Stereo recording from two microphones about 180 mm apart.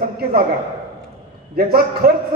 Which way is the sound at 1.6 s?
55° right (ahead or behind).